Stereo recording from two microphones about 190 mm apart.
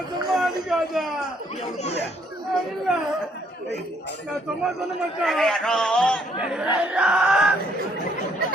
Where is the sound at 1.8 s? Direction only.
35° left (ahead or behind).